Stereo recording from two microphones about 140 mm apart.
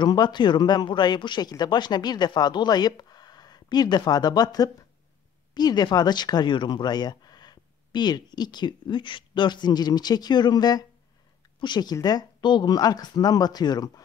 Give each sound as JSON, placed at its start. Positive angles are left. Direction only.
{"t": 0.0, "sound": "speech", "side_deg": 30}